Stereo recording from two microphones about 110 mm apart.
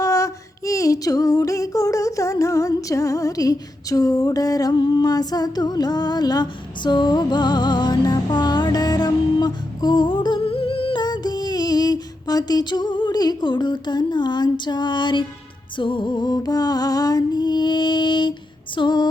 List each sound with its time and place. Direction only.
0.0 s female singing: 30° left (ahead or behind); by 11.0 s 55° left (ahead or behind)
11.0 s music: 40° left (ahead or behind)
18.8 s female singing: 40° left (ahead or behind)